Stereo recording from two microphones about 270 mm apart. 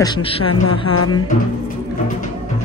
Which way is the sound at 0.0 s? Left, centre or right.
Centre.